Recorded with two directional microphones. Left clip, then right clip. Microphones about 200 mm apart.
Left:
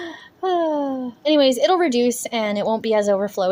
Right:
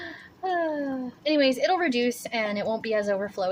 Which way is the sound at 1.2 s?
30° left (ahead or behind).